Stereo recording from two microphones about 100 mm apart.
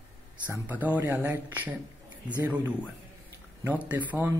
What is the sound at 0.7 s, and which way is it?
Speech, 15° right (ahead or behind).